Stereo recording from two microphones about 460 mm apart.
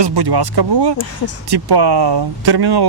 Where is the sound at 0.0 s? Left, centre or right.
Right.